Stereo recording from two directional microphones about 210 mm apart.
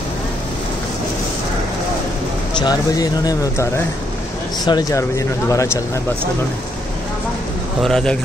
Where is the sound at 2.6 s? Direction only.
20° left (ahead or behind).